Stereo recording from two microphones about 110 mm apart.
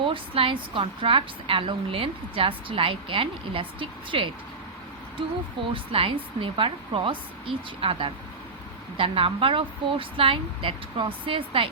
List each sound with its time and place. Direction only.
0.0 s a woman's voice: 55° right (ahead or behind)
5.7 s a woman's voice: 55° right (ahead or behind)